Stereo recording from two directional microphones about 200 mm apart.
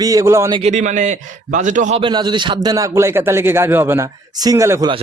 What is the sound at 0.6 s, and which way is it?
A man's voice, 35° right (ahead or behind).